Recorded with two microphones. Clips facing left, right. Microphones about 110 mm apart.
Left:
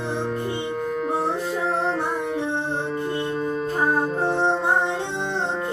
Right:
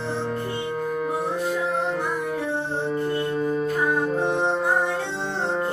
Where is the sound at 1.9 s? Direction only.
25° left (ahead or behind).